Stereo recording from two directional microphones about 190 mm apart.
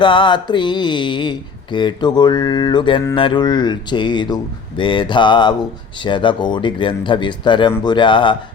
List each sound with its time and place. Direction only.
0.0 s speech: 25° left (ahead or behind)